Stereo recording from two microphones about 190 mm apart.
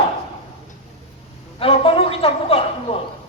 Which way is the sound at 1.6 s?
30° left (ahead or behind).